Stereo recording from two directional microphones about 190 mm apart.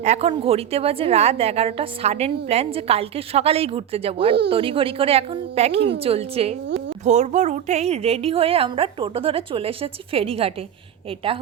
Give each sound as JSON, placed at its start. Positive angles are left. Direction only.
{"t": 0.0, "sound": "a woman's voice", "side_deg": -35}
{"t": 6.7, "sound": "a woman's voice", "side_deg": -65}
{"t": 7.0, "sound": "a woman's voice", "side_deg": -40}